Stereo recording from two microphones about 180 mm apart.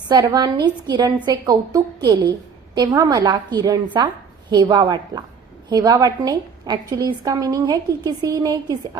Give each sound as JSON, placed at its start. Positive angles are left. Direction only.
{"t": 0.1, "sound": "a woman's voice", "side_deg": -25}